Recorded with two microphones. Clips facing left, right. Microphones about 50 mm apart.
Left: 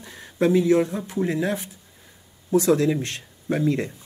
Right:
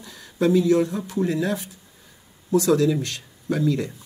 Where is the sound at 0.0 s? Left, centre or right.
Left.